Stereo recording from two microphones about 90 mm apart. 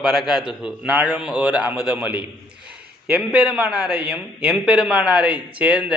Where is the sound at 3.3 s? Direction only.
15° right (ahead or behind).